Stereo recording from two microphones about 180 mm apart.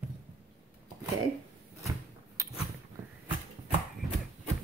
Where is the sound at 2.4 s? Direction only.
15° right (ahead or behind).